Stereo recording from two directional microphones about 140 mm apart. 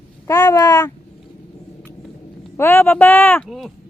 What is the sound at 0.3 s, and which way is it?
Speech, 25° left (ahead or behind).